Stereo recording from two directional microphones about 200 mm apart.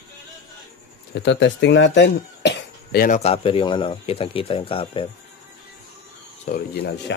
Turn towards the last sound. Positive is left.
turn(degrees=60)  # may be behind; listen again after turning